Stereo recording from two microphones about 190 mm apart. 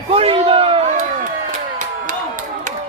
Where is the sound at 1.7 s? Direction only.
40° right (ahead or behind).